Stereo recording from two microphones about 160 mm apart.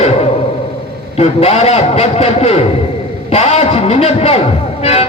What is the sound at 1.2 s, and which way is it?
A man's voice, 40° left (ahead or behind).